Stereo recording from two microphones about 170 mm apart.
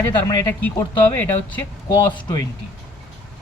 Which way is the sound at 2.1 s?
20° left (ahead or behind).